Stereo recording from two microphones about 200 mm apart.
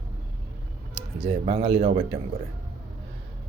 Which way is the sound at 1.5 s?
25° right (ahead or behind).